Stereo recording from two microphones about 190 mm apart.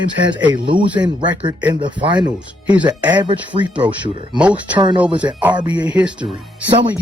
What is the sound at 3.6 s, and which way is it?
Speech, 5° right (ahead or behind).